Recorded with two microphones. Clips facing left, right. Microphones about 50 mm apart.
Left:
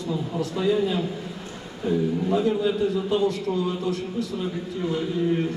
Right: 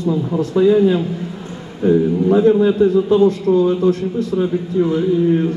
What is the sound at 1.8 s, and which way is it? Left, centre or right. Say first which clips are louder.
A man's voice: right 10 dB; right.